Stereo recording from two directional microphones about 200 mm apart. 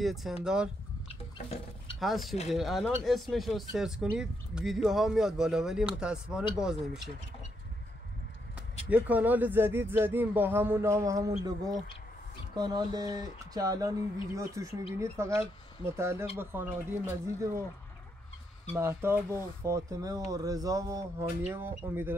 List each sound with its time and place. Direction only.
0.0 s speech: centre (ahead or behind)
2.0 s speech: centre (ahead or behind)
8.5 s speech: 5° right (ahead or behind)
18.8 s speech: 10° right (ahead or behind)